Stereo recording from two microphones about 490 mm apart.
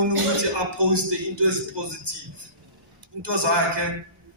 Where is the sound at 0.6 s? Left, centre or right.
Right.